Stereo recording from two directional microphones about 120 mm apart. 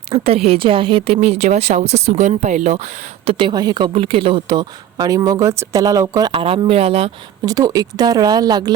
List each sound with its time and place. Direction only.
0.1 s a woman's voice: 55° right (ahead or behind)
3.3 s speech: 40° right (ahead or behind)
6.3 s speech: 50° right (ahead or behind)
7.4 s speech: 30° right (ahead or behind)